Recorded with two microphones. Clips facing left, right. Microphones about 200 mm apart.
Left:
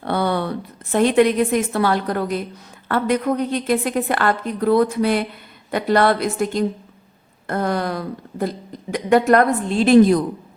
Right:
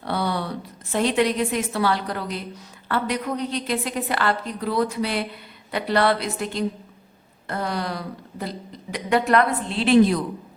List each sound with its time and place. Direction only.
0.0 s a woman's voice: 55° left (ahead or behind)